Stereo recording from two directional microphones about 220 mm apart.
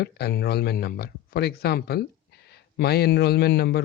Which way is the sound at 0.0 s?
45° left (ahead or behind).